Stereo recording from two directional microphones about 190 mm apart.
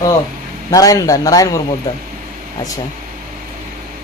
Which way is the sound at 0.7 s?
20° left (ahead or behind).